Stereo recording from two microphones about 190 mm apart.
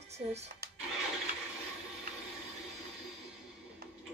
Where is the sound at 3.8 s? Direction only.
50° right (ahead or behind).